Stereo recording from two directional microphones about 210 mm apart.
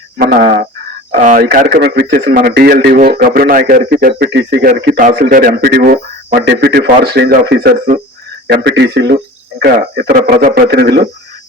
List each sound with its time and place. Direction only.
0.2 s speech: 45° right (ahead or behind)